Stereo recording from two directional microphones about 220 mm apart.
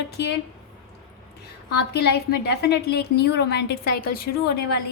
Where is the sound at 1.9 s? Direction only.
50° left (ahead or behind).